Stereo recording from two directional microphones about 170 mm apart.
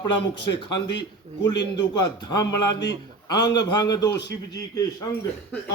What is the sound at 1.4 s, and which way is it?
A man's voice, 25° left (ahead or behind).